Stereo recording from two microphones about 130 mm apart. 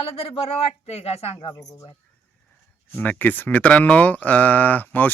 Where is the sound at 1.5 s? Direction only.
25° left (ahead or behind).